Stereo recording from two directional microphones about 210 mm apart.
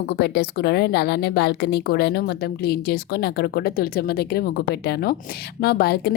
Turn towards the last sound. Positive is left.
turn(degrees=50)  # may be behind; listen again after turning